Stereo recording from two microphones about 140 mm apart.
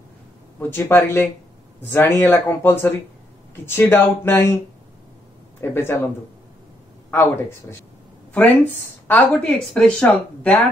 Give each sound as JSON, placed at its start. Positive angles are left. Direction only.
{"t": 0.6, "sound": "speech", "side_deg": 15}
{"t": 5.6, "sound": "speech", "side_deg": 15}
{"t": 8.3, "sound": "speech", "side_deg": 10}